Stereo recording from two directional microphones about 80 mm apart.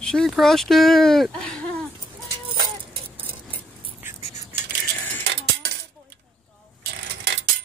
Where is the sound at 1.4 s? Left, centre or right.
Centre.